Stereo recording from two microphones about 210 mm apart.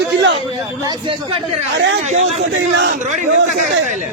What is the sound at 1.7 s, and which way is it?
Speech, 55° right (ahead or behind).